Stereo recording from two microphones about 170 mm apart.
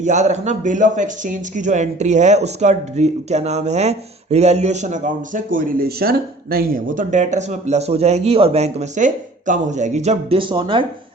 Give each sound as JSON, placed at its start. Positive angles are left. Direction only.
{"t": 0.0, "sound": "a man's voice", "side_deg": -45}